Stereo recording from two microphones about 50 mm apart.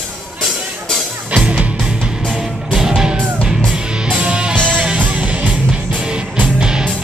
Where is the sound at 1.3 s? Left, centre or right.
Right.